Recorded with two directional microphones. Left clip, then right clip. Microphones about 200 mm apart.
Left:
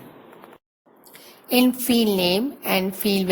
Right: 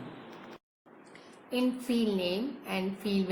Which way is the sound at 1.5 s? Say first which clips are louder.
Left 11 dB; 50° left (ahead or behind).